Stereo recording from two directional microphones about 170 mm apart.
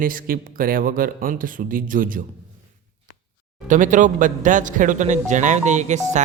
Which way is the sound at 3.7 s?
50° right (ahead or behind).